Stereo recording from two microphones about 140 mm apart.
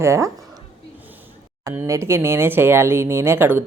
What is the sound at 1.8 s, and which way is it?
A woman's voice, 20° right (ahead or behind).